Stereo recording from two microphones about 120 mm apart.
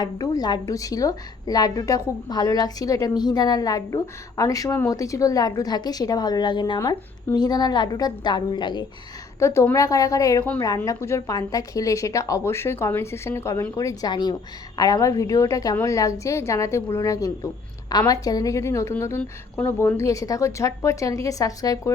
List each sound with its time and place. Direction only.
0.0 s a woman's voice: 35° left (ahead or behind)
9.4 s a woman's voice: 25° left (ahead or behind)